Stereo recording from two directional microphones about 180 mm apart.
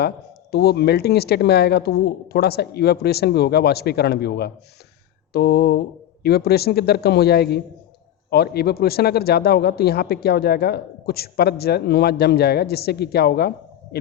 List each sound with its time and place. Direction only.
0.5 s a man's voice: 60° left (ahead or behind)